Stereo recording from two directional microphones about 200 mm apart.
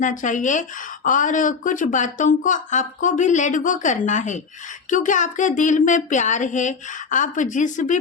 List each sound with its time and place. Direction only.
0.0 s speech: 40° left (ahead or behind)